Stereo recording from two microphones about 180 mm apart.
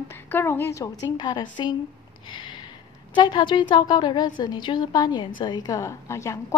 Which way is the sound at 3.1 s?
25° left (ahead or behind).